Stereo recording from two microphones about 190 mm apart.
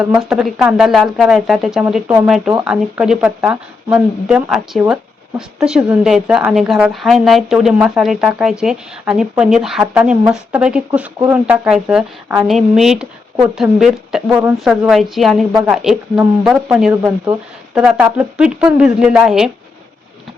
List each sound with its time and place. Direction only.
0.0 s speech: 5° right (ahead or behind)